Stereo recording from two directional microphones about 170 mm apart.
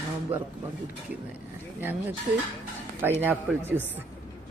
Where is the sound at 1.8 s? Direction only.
10° right (ahead or behind).